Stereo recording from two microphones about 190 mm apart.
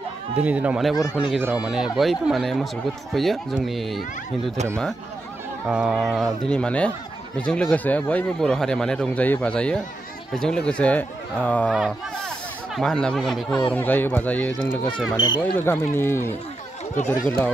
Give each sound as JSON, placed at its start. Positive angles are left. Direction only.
{"t": 0.4, "sound": "speech", "side_deg": -5}
{"t": 5.7, "sound": "speech", "side_deg": -5}
{"t": 11.7, "sound": "speech", "side_deg": -5}
{"t": 15.1, "sound": "speech", "side_deg": 25}
{"t": 15.4, "sound": "speech", "side_deg": 10}
{"t": 16.9, "sound": "speech", "side_deg": 40}